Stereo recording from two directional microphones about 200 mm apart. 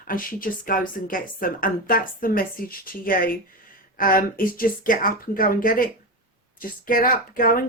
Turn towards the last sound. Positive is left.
turn(degrees=45)  # may be behind; listen again after turning